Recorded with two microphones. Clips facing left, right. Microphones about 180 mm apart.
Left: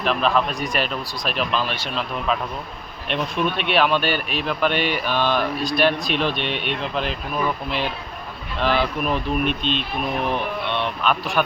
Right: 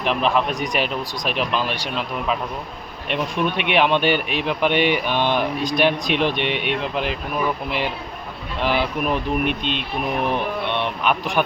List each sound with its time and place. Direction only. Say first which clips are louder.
0.0 s speech: even; 15° right (ahead or behind)
8.6 s speech: even; 15° right (ahead or behind)